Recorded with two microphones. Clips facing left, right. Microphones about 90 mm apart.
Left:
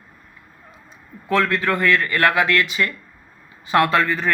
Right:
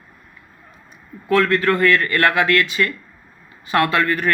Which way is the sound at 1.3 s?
20° left (ahead or behind).